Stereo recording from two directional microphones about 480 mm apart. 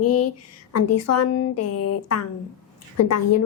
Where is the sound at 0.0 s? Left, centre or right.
Left.